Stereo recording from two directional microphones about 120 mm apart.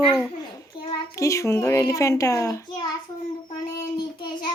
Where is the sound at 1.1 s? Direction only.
25° left (ahead or behind).